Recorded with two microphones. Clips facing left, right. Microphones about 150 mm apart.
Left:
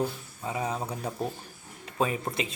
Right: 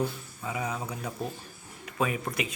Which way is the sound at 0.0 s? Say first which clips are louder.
Left 1 dB; 30° left (ahead or behind).